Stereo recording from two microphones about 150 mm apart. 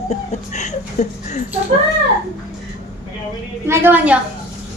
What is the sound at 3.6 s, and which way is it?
Speech, 15° right (ahead or behind).